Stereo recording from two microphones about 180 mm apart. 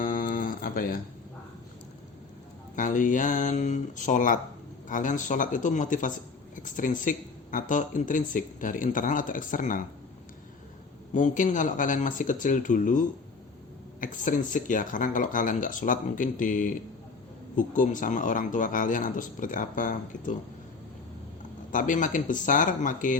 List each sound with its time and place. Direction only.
0.0 s a sound: 50° left (ahead or behind)
2.7 s speech: 45° left (ahead or behind)
11.1 s speech: 45° left (ahead or behind)
14.0 s speech: 45° left (ahead or behind)
21.7 s speech: 45° left (ahead or behind)